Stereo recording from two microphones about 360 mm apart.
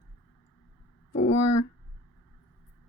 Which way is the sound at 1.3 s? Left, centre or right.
Left.